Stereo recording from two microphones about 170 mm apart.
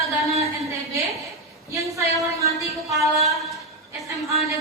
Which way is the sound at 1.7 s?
20° right (ahead or behind).